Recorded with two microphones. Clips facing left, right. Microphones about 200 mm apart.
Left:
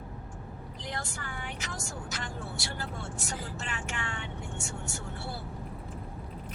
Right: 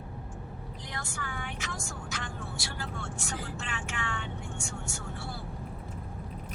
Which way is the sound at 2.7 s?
40° left (ahead or behind).